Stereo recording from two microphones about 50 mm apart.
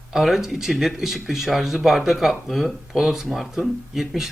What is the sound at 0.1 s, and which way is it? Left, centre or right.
Speech, centre.